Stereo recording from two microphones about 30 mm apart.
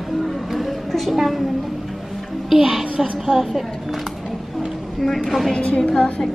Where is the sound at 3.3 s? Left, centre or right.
Left.